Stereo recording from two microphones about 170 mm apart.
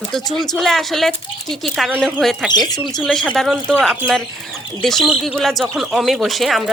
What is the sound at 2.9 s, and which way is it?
Speech, 5° left (ahead or behind).